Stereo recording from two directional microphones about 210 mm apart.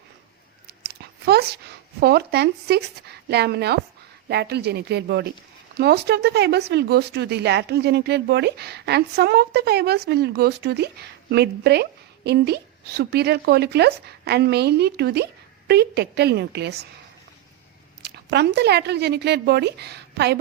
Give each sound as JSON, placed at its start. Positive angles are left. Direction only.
{"t": 0.8, "sound": "speech", "side_deg": -50}
{"t": 18.0, "sound": "speech", "side_deg": -55}